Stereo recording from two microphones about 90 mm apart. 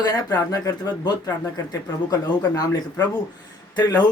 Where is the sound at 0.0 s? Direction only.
45° left (ahead or behind).